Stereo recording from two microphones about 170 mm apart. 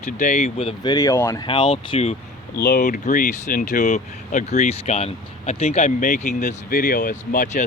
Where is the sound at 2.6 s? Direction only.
55° left (ahead or behind).